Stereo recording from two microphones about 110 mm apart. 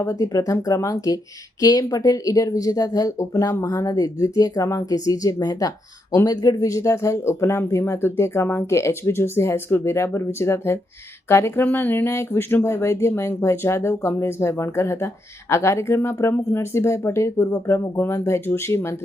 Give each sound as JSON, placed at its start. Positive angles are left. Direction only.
{"t": 0.0, "sound": "speech", "side_deg": 30}